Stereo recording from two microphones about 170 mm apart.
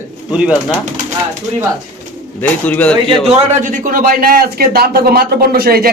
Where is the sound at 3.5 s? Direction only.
50° right (ahead or behind).